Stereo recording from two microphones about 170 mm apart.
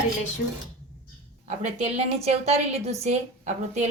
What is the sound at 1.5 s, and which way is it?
A woman's voice, 40° right (ahead or behind).